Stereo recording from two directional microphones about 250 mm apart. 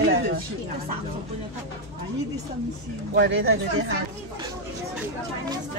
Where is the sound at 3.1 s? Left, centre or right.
Right.